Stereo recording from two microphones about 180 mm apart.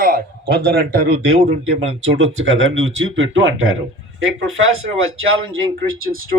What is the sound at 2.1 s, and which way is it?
Speech, 90° right.